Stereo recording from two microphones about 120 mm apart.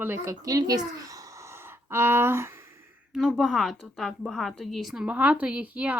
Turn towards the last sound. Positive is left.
turn(degrees=-10)  # may be behind; listen again after turning